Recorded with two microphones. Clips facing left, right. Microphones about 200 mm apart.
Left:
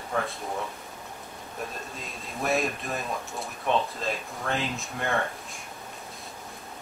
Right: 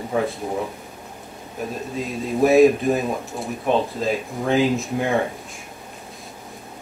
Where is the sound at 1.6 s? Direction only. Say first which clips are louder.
Right 10 dB; centre (ahead or behind).